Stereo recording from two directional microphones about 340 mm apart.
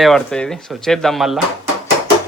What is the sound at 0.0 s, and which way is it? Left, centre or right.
Speech, centre.